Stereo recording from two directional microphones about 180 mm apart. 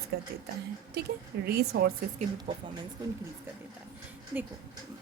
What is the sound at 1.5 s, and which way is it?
Speech, 60° right (ahead or behind).